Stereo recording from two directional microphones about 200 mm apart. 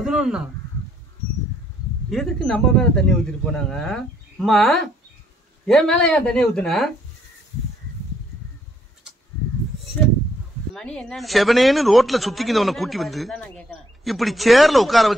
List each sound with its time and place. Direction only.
0.0 s a sound: 5° right (ahead or behind)
2.0 s speech: centre (ahead or behind)
10.7 s speech: 5° left (ahead or behind)